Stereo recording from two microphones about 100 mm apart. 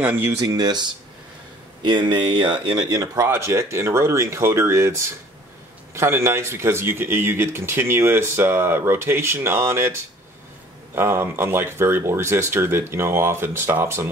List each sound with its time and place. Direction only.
0.0 s speech: 20° right (ahead or behind)
0.4 s speech: 40° right (ahead or behind)
3.3 s speech: 25° right (ahead or behind)
11.0 s speech: 20° right (ahead or behind)